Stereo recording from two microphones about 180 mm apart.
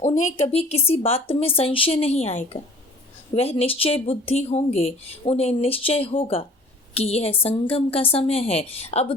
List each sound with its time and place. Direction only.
0.0 s speech: 45° left (ahead or behind)